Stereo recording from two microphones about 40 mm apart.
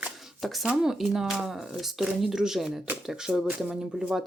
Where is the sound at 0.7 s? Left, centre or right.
Centre.